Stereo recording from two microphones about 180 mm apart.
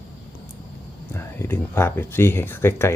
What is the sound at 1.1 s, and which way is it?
Speech, 15° left (ahead or behind).